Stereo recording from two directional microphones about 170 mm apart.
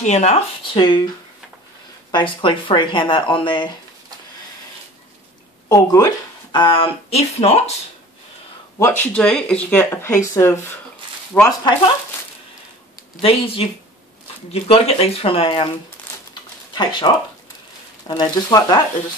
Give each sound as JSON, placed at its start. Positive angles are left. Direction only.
{"t": 0.0, "sound": "speech", "side_deg": 40}
{"t": 2.0, "sound": "speech", "side_deg": 30}
{"t": 5.7, "sound": "speech", "side_deg": 20}
{"t": 8.7, "sound": "speech", "side_deg": 15}
{"t": 13.1, "sound": "speech", "side_deg": 35}
{"t": 16.7, "sound": "speech", "side_deg": 25}